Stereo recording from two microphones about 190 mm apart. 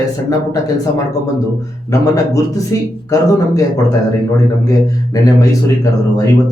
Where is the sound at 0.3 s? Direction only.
20° left (ahead or behind).